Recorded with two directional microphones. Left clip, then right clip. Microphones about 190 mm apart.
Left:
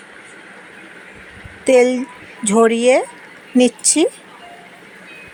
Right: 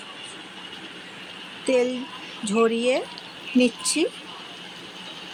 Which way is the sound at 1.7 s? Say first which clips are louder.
Left 10 dB; 30° left (ahead or behind).